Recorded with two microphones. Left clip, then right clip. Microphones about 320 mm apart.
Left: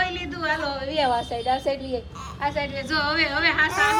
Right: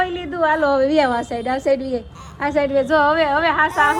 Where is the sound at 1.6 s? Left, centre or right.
Centre.